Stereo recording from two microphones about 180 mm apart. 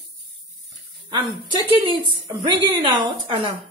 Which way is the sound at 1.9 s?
25° right (ahead or behind).